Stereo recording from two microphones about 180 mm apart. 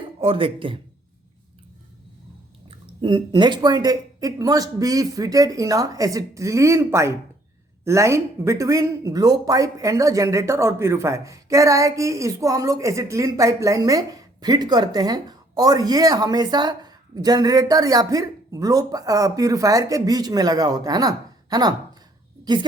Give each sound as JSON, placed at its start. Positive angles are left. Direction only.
{"t": 0.2, "sound": "speech", "side_deg": -30}
{"t": 2.6, "sound": "speech", "side_deg": -25}